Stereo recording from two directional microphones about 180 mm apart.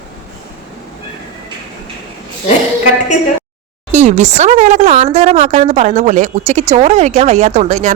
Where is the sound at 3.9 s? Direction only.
40° right (ahead or behind).